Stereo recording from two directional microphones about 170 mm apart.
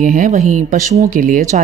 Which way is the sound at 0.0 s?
50° right (ahead or behind).